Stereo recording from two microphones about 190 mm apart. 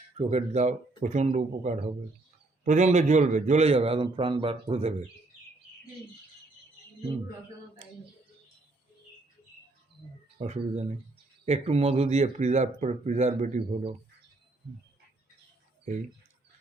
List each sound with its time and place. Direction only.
0.2 s speech: 35° right (ahead or behind)
10.3 s speech: 35° right (ahead or behind)